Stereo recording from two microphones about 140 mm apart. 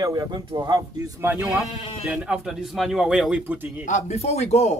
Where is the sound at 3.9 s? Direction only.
50° left (ahead or behind).